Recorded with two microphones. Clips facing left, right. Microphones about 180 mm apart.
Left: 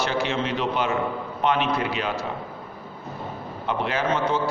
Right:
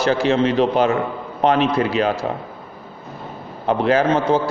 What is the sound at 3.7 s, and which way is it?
Speech, 40° right (ahead or behind).